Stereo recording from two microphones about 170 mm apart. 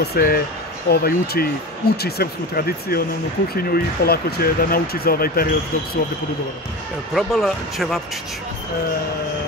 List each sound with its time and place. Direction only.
0.0 s speech: 65° left (ahead or behind)
7.2 s speech: centre (ahead or behind)